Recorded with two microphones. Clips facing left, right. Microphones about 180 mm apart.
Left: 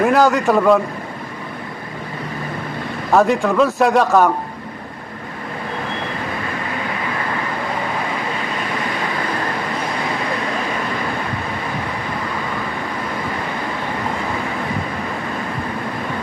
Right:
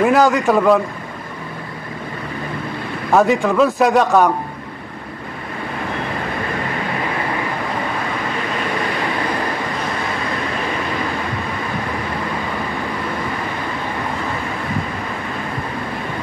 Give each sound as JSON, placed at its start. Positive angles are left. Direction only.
{"t": 0.0, "sound": "speech", "side_deg": 0}
{"t": 3.1, "sound": "speech", "side_deg": 0}